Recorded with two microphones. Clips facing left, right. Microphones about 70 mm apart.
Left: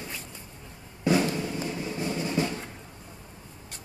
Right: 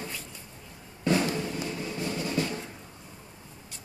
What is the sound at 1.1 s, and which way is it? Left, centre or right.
Music, centre.